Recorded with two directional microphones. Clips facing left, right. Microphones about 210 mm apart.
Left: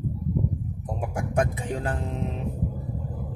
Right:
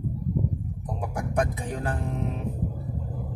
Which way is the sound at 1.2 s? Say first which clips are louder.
Left 1 dB; 25° left (ahead or behind).